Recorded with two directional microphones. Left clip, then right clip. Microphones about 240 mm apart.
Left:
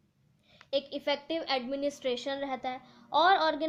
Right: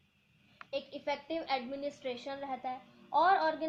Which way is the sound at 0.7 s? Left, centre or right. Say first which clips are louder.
Left 6 dB; left.